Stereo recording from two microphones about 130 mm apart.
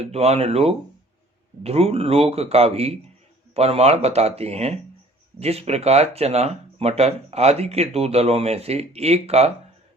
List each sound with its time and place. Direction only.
0.0 s speech: 55° right (ahead or behind)